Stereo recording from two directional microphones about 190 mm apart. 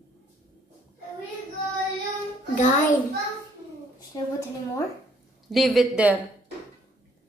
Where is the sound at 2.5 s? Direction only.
40° left (ahead or behind).